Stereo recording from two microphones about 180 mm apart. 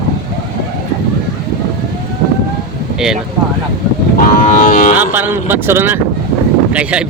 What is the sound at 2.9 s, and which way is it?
Speech, 5° right (ahead or behind).